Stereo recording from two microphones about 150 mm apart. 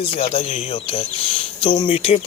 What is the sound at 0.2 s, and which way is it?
Speech, 40° left (ahead or behind).